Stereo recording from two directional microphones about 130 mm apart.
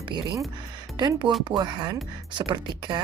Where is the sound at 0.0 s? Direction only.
35° right (ahead or behind).